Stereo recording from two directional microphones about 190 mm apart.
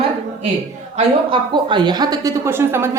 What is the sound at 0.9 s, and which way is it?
Speech, 25° right (ahead or behind).